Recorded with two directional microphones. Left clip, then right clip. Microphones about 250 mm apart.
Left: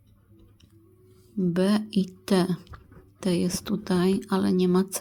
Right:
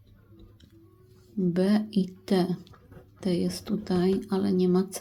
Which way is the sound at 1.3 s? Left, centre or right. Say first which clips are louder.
Left 1 dB; centre.